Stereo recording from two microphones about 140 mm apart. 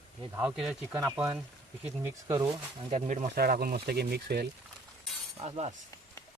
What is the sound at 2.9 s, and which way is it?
Speech, 65° right (ahead or behind).